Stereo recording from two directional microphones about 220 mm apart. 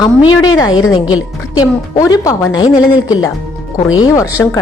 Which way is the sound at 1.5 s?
15° left (ahead or behind).